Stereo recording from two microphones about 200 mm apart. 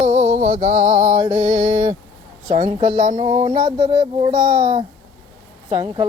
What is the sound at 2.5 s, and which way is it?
Speech, 30° right (ahead or behind).